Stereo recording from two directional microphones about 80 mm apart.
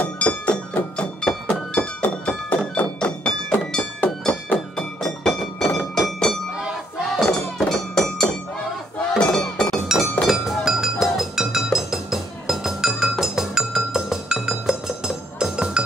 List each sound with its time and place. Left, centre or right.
0.0 s music: centre
0.9 s thunk: centre
3.7 s music: centre
7.2 s a sound: centre
9.2 s chink: centre
10.2 s music: centre